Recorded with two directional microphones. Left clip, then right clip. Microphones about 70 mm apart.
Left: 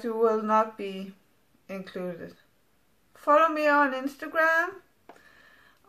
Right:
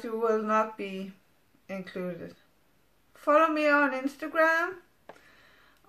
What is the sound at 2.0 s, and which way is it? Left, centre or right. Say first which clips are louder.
Speech: left 3 dB; left.